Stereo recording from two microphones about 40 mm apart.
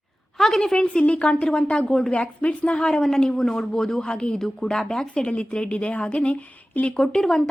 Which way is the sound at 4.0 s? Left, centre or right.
Left.